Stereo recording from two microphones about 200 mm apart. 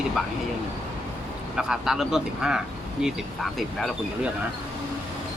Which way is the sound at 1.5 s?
5° right (ahead or behind).